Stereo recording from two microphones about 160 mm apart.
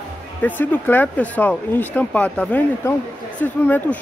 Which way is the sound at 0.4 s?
10° left (ahead or behind).